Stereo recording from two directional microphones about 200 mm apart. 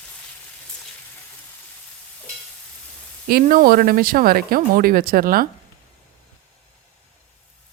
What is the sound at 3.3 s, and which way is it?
Speech, 45° right (ahead or behind).